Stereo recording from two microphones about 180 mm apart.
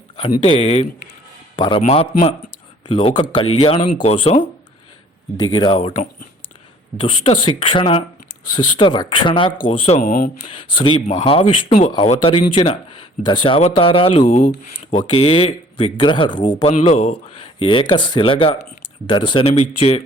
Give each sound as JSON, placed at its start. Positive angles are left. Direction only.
{"t": 0.4, "sound": "a man's voice", "side_deg": 35}
{"t": 10.3, "sound": "speech", "side_deg": 30}
{"t": 14.3, "sound": "speech", "side_deg": 50}
{"t": 15.0, "sound": "speech", "side_deg": 30}
{"t": 16.7, "sound": "speech", "side_deg": 40}